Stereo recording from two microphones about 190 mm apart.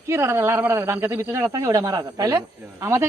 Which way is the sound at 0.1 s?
15° right (ahead or behind).